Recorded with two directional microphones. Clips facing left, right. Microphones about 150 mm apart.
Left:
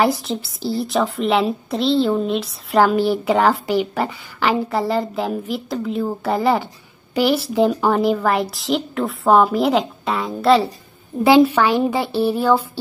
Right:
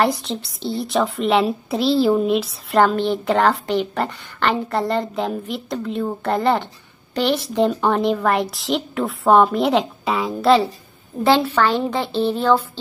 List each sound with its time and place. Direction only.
0.0 s a woman's voice: centre (ahead or behind)
11.2 s a woman's voice: 10° left (ahead or behind)